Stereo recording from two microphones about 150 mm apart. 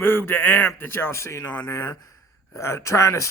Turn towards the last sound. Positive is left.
turn(degrees=20)  # may be behind; listen again after turning